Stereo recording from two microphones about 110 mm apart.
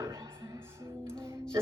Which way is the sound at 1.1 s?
10° left (ahead or behind).